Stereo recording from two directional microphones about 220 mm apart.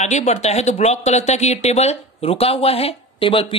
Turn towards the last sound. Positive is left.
turn(degrees=25)  # may be behind; listen again after turning